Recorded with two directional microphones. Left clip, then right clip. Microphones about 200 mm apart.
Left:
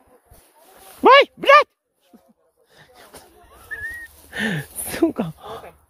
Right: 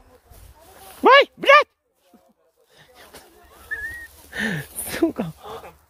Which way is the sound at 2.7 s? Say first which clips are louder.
Left 1 dB; 20° left (ahead or behind).